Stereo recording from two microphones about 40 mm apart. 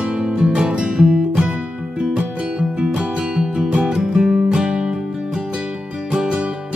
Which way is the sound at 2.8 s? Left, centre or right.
Right.